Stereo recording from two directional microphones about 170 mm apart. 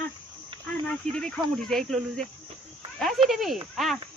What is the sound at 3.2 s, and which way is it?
Speech, centre (ahead or behind).